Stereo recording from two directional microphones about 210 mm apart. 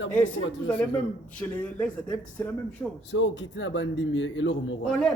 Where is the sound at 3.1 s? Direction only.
60° left (ahead or behind).